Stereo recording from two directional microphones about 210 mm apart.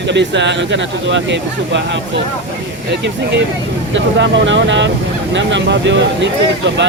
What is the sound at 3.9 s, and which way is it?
Speech, 60° right (ahead or behind).